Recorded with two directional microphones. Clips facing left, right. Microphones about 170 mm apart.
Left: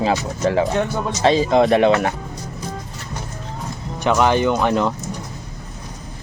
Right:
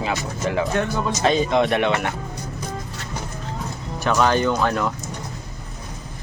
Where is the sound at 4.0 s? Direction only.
20° left (ahead or behind).